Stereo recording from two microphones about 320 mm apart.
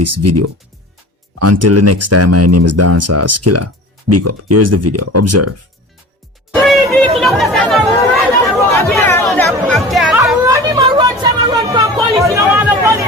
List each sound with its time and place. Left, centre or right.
0.0 s speech: right
6.5 s music: centre
7.2 s chatter: centre